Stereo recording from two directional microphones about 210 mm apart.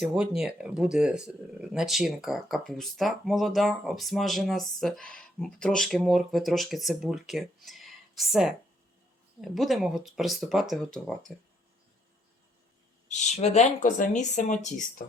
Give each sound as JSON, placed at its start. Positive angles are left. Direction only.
{"t": 0.0, "sound": "speech", "side_deg": -5}
{"t": 13.1, "sound": "speech", "side_deg": 35}